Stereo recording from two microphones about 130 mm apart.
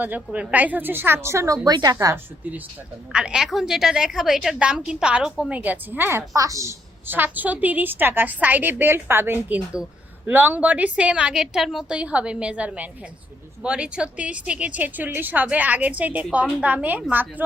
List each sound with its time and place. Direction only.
0.0 s a woman's voice: 10° right (ahead or behind); by 2.1 s 30° right (ahead or behind)
3.1 s a woman's voice: 5° right (ahead or behind)